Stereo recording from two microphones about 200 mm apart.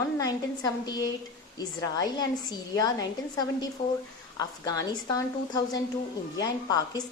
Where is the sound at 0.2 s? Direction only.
20° left (ahead or behind).